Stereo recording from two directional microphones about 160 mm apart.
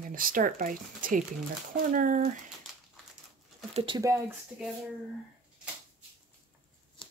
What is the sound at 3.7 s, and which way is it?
Speech, 30° right (ahead or behind).